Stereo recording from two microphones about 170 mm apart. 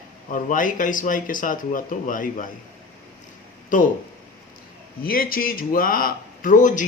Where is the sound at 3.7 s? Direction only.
50° left (ahead or behind).